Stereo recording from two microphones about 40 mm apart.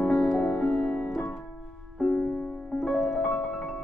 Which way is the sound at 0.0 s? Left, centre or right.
Left.